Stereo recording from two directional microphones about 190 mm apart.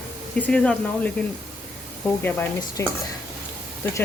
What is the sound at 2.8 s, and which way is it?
Speech, 15° left (ahead or behind).